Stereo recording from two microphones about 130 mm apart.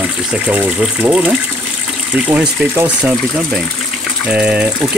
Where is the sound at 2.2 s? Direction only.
10° right (ahead or behind).